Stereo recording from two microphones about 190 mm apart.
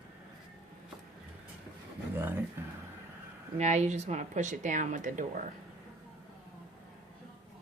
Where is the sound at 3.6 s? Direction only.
35° right (ahead or behind).